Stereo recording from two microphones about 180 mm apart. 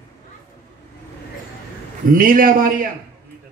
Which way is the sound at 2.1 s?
50° right (ahead or behind).